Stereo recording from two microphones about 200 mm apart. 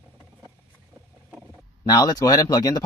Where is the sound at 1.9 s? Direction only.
20° left (ahead or behind).